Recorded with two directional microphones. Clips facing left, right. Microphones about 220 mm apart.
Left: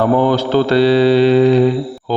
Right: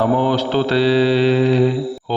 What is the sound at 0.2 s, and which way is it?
A man's voice, 50° left (ahead or behind).